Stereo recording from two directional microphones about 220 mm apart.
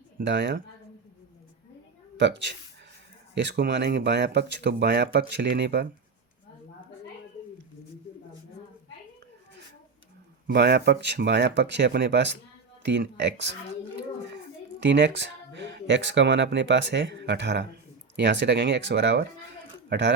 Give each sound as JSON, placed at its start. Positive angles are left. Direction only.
{"t": 0.2, "sound": "speech", "side_deg": -55}
{"t": 2.1, "sound": "speech", "side_deg": -55}
{"t": 10.4, "sound": "speech", "side_deg": -50}
{"t": 14.8, "sound": "speech", "side_deg": -55}